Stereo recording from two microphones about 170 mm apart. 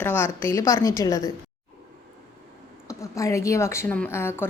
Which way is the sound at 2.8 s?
20° left (ahead or behind).